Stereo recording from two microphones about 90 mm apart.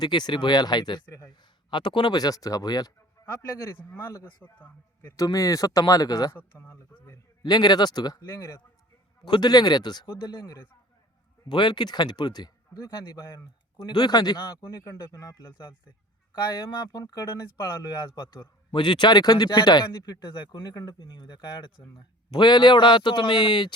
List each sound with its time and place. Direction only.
0.0 s speech: 55° left (ahead or behind)
3.2 s a sound: 40° left (ahead or behind)
3.8 s speech: 30° left (ahead or behind)
5.1 s speech: 40° left (ahead or behind)
6.3 s speech: 30° left (ahead or behind)
7.4 s speech: 50° left (ahead or behind)
9.2 s speech: 55° left (ahead or behind)
11.4 s speech: 55° left (ahead or behind)
14.8 s speech: 35° left (ahead or behind)
16.7 s speech: 50° left (ahead or behind)
17.0 s speech: 35° left (ahead or behind)
18.1 s speech: 55° left (ahead or behind)